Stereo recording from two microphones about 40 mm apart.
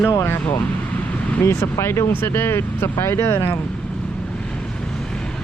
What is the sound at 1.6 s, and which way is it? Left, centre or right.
Speech, left.